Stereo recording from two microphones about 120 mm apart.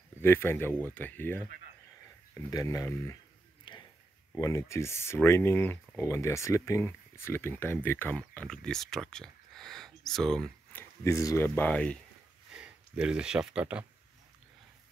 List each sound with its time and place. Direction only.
0.2 s speech: 20° left (ahead or behind)
3.7 s a sound: 45° left (ahead or behind)
4.4 s speech: 25° left (ahead or behind); by 10.5 s 5° left (ahead or behind)
10.7 s a sound: 15° left (ahead or behind)
11.1 s speech: 25° left (ahead or behind)
12.5 s speech: 10° right (ahead or behind)